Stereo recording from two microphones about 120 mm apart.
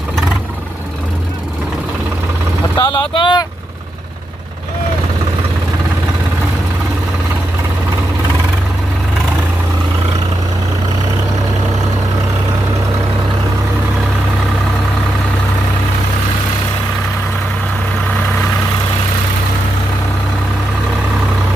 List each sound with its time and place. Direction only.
2.7 s speech: 40° left (ahead or behind)